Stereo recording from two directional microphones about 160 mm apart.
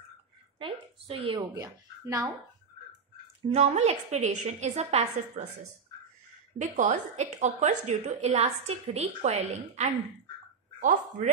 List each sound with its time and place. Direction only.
0.6 s speech: 35° right (ahead or behind)
1.6 s speech: 20° right (ahead or behind)
3.4 s a woman's voice: 45° right (ahead or behind)
6.6 s a woman's voice: 50° right (ahead or behind)